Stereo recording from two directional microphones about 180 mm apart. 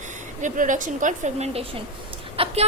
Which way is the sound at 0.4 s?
45° right (ahead or behind).